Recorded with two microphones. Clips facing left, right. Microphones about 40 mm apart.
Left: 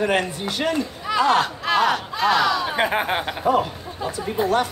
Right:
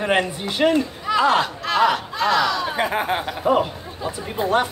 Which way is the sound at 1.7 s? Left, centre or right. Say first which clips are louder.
Even; centre.